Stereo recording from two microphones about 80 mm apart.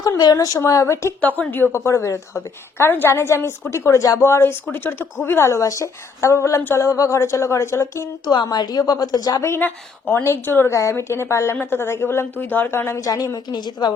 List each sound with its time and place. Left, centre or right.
0.3 s a woman's voice: left
1.4 s a woman's voice: left
8.2 s a woman's voice: left
9.5 s a woman's voice: left
13.0 s a woman's voice: left
13.5 s a woman's voice: left